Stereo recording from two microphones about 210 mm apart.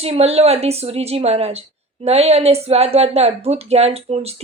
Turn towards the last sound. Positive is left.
turn(degrees=-30)  # may be behind; listen again after turning